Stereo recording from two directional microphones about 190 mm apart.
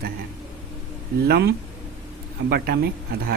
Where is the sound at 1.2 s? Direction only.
55° right (ahead or behind).